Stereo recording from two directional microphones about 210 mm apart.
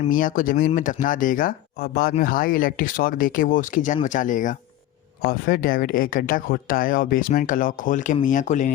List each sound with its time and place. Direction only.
0.0 s speech: 40° left (ahead or behind)